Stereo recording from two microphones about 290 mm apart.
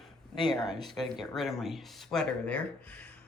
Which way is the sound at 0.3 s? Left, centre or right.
Centre.